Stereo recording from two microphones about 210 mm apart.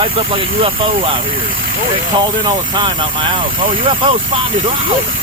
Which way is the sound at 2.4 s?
20° right (ahead or behind).